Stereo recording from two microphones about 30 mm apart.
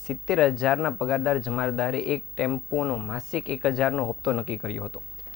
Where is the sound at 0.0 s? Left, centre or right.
Centre.